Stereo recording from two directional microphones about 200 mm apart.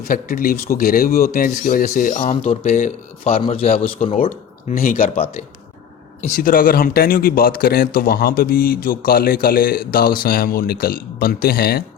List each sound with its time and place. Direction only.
0.0 s speech: 45° left (ahead or behind)
2.3 s speech: 30° left (ahead or behind)
2.6 s speech: 40° left (ahead or behind)
4.7 s speech: 45° left (ahead or behind)
5.1 s speech: 30° left (ahead or behind)
6.2 s speech: 45° left (ahead or behind)